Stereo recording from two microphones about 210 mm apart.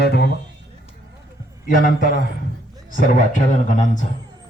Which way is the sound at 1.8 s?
40° left (ahead or behind).